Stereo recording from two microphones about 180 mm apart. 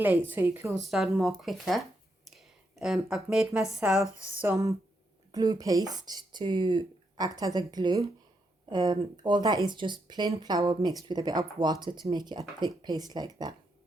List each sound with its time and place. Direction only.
0.3 s speech: 10° right (ahead or behind)